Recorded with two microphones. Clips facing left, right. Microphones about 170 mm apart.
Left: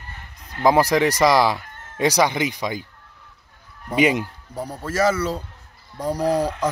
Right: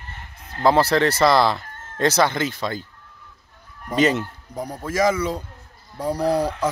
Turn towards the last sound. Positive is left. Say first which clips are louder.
# even
turn(degrees=10)  # may be behind; listen again after turning